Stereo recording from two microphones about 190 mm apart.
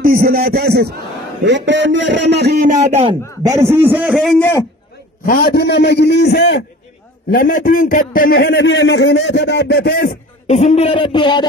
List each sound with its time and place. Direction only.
0.0 s a man's voice: 45° right (ahead or behind)
1.4 s a man's voice: 70° right (ahead or behind)
2.7 s speech: 30° right (ahead or behind)
3.4 s a man's voice: 15° right (ahead or behind)
4.4 s speech: 15° left (ahead or behind)
5.2 s a man's voice: 50° left (ahead or behind)
7.2 s a man's voice: 50° left (ahead or behind); by 11.4 s 25° left (ahead or behind)